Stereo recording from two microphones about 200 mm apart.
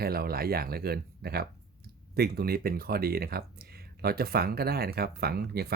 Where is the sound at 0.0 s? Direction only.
50° right (ahead or behind).